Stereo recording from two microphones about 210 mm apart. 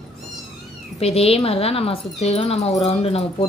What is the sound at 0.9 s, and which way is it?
Speech, 30° left (ahead or behind).